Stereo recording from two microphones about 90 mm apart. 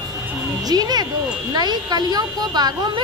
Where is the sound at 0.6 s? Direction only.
45° right (ahead or behind).